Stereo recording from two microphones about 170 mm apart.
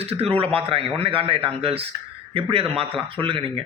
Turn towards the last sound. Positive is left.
turn(degrees=-30)  # may be behind; listen again after turning